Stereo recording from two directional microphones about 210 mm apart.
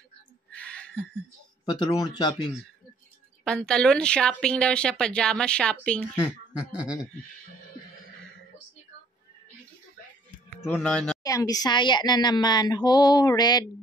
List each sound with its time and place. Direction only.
0.5 s a sound: 5° left (ahead or behind)
1.7 s speech: 20° left (ahead or behind)
3.4 s speech: 5° left (ahead or behind)
10.5 s speech: 5° left (ahead or behind)
11.2 s speech: 15° left (ahead or behind)